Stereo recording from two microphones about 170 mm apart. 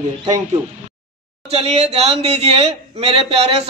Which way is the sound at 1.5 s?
40° right (ahead or behind).